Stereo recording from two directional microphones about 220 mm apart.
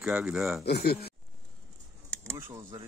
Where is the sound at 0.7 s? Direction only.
45° left (ahead or behind).